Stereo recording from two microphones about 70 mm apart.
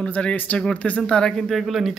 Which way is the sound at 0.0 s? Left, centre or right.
Centre.